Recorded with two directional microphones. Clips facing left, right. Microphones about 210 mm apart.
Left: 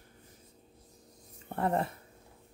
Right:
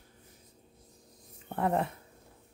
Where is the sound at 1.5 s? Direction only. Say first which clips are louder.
Right 1 dB; centre (ahead or behind).